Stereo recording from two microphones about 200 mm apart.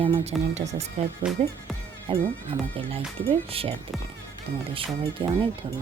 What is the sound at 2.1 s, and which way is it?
Speech, 25° right (ahead or behind).